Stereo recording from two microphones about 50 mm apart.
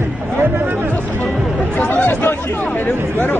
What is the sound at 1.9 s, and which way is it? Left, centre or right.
Chatter, left.